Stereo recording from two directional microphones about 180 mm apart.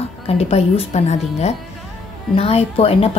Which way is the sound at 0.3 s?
35° left (ahead or behind).